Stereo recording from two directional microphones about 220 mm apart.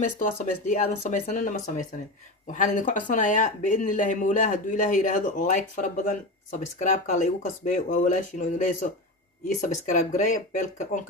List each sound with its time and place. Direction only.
0.2 s speech: 35° left (ahead or behind)